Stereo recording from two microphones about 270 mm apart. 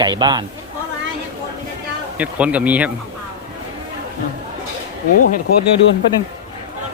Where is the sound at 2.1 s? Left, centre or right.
Centre.